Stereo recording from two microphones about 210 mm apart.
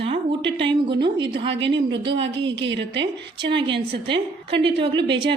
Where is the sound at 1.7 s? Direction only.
25° right (ahead or behind).